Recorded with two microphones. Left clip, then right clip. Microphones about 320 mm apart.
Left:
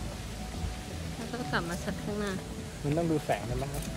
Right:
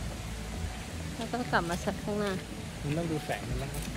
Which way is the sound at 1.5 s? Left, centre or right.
Centre.